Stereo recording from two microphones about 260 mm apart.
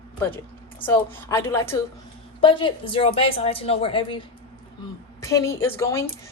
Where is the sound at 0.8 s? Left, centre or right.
Centre.